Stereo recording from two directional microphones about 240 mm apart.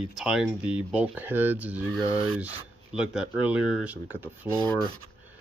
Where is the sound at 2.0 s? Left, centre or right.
Right.